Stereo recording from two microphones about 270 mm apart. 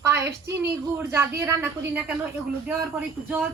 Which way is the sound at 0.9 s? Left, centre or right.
Centre.